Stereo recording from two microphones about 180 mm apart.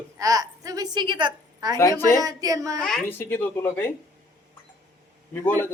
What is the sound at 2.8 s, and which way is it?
Speech, 5° left (ahead or behind).